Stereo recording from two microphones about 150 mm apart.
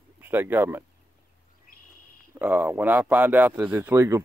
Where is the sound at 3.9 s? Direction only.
20° right (ahead or behind).